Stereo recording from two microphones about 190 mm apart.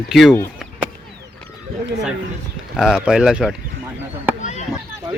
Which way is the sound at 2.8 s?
5° right (ahead or behind).